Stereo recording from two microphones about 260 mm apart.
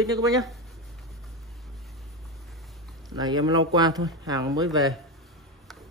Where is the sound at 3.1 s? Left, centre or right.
Centre.